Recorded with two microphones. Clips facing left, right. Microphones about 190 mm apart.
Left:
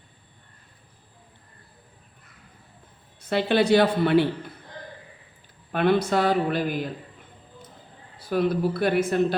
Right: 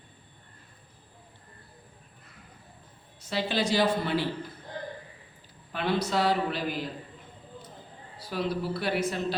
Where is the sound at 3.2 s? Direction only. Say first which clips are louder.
Left 7 dB; 60° left (ahead or behind).